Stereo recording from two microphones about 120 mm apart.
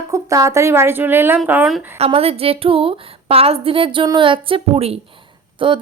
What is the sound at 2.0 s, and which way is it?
A woman's voice, 55° right (ahead or behind).